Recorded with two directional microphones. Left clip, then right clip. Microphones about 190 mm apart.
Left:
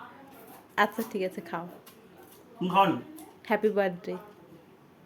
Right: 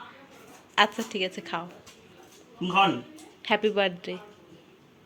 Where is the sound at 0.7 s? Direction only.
15° left (ahead or behind).